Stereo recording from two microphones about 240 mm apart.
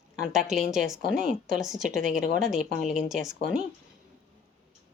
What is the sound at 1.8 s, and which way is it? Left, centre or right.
Speech, right.